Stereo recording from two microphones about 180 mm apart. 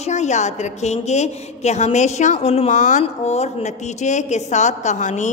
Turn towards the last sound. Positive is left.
turn(degrees=40)  # may be behind; listen again after turning